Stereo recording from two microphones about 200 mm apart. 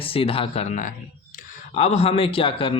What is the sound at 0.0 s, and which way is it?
A man's voice, 30° left (ahead or behind).